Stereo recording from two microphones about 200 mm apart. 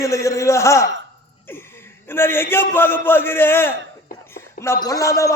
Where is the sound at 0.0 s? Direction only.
15° left (ahead or behind).